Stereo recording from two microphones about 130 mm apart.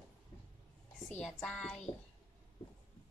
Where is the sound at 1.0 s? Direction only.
5° left (ahead or behind).